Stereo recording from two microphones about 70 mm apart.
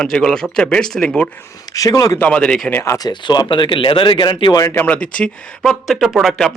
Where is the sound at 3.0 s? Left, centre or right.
Left.